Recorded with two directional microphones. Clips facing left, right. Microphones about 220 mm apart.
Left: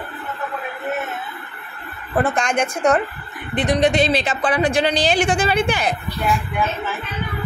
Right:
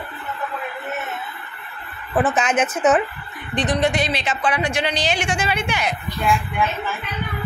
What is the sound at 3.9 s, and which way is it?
Speech, 30° left (ahead or behind).